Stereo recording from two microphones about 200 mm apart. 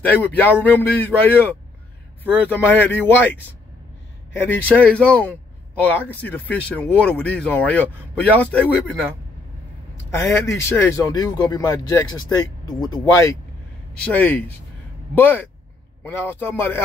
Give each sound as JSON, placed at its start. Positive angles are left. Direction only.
{"t": 0.0, "sound": "speech", "side_deg": 10}
{"t": 4.4, "sound": "speech", "side_deg": 10}
{"t": 10.1, "sound": "speech", "side_deg": 15}